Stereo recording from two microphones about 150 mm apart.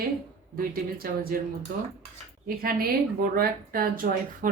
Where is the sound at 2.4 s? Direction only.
80° right.